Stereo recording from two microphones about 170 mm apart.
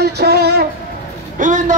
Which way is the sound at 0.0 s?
70° right (ahead or behind).